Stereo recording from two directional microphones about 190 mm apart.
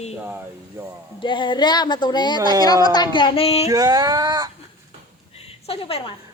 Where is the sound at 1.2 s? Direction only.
25° left (ahead or behind).